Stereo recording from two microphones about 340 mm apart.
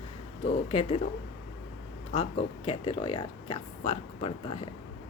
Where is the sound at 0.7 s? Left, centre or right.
Centre.